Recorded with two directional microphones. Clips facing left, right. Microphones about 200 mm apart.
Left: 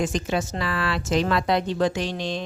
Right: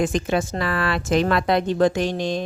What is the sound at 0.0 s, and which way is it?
A woman's voice, 55° right (ahead or behind).